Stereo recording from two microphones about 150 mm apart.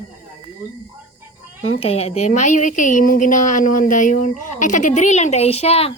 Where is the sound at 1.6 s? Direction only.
40° left (ahead or behind).